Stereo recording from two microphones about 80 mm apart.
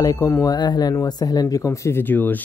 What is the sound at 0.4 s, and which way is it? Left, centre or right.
Speech, left.